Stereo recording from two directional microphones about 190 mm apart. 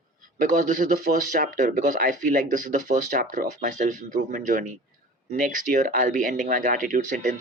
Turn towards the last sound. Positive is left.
turn(degrees=-45)  # may be behind; listen again after turning